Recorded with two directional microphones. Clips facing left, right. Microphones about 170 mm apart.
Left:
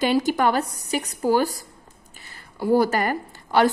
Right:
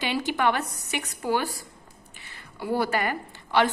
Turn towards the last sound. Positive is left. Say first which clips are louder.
# left 4 dB
turn(degrees=40)  # may be behind; listen again after turning